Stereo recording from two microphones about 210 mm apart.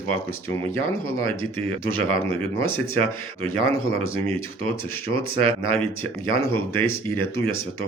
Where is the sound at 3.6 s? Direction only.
75° left (ahead or behind).